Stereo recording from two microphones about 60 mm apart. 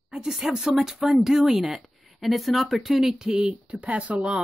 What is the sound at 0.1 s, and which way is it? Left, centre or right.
Speech, centre.